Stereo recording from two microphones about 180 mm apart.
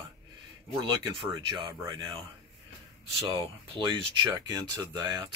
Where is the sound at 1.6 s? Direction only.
25° right (ahead or behind).